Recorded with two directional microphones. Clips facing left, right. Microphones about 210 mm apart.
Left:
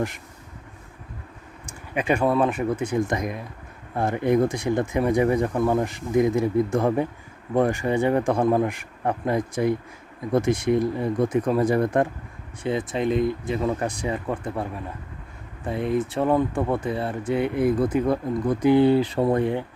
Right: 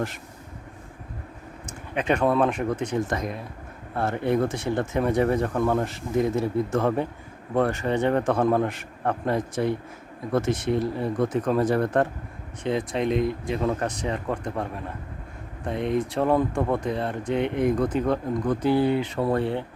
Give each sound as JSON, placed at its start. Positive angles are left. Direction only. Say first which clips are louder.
{"t": 1.6, "sound": "speech", "louder": "left 1 dB", "side_deg": 10}
{"t": 18.8, "sound": "speech", "louder": "left 5 dB", "side_deg": 35}
{"t": 19.2, "sound": "speech", "louder": "left 3 dB", "side_deg": 15}